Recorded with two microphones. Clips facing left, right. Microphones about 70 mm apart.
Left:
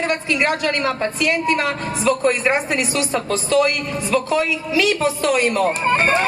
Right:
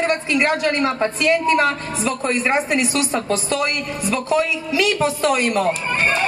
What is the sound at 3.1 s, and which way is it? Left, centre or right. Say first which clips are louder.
A woman's voice: left 3 dB; right.